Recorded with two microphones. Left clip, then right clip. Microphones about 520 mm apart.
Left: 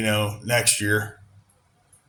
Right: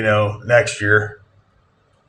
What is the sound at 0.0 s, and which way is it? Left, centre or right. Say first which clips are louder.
Speech: right 7 dB; left.